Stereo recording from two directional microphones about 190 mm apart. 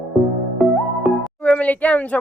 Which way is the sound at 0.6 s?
Centre (ahead or behind).